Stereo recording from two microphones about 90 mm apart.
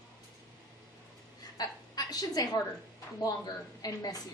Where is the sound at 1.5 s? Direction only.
45° left (ahead or behind).